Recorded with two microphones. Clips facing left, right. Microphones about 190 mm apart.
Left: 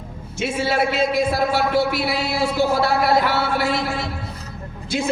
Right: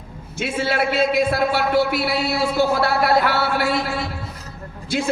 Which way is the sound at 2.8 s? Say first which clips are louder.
Even; 60° right (ahead or behind).